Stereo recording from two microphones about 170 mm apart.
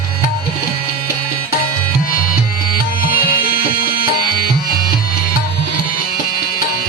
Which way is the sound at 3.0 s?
60° left (ahead or behind).